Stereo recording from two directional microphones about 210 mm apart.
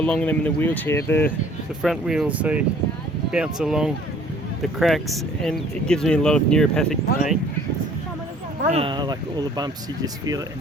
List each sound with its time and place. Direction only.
0.0 s speech: 5° left (ahead or behind)
1.8 s speech: centre (ahead or behind)
8.6 s speech: 30° right (ahead or behind)